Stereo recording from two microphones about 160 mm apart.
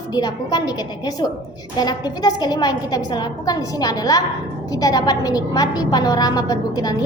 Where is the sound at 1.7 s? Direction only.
25° left (ahead or behind).